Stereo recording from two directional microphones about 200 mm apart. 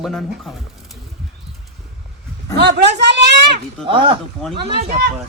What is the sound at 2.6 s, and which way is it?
Speech, 60° right (ahead or behind).